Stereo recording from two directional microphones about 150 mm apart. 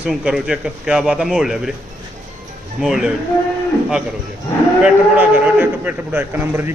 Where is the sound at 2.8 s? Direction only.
Centre (ahead or behind).